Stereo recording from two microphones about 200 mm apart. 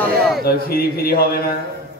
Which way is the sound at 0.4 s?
50° left (ahead or behind).